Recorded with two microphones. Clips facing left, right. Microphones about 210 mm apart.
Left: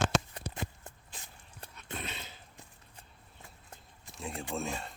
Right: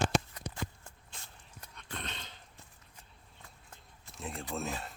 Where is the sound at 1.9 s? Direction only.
5° left (ahead or behind).